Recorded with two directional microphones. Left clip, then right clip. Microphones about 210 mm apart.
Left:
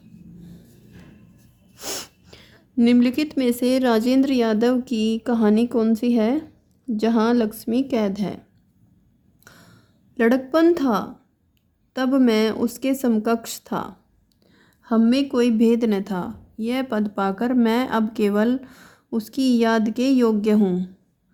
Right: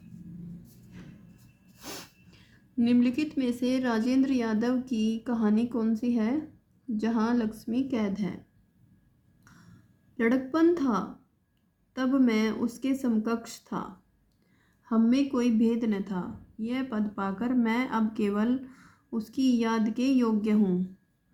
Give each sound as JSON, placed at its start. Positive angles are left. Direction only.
{"t": 1.7, "sound": "a woman's voice", "side_deg": 40}
{"t": 9.4, "sound": "a sound", "side_deg": 45}
{"t": 10.2, "sound": "a woman's voice", "side_deg": 45}